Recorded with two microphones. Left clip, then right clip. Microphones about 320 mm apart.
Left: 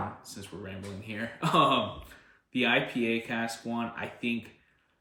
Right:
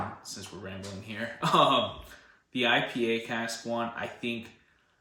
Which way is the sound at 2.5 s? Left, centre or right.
Centre.